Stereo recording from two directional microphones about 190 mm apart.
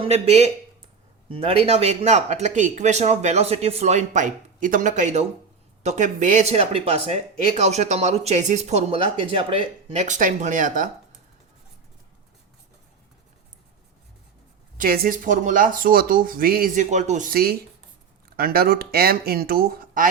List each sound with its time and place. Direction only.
0.0 s speech: 35° right (ahead or behind)
14.8 s speech: 50° right (ahead or behind)